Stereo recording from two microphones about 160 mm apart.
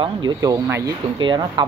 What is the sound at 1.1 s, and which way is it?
Speech, 30° right (ahead or behind).